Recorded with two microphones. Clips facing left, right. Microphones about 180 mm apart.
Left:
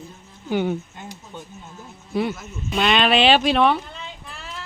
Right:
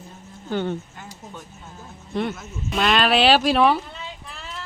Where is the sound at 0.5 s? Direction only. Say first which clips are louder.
Left 3 dB; 10° left (ahead or behind).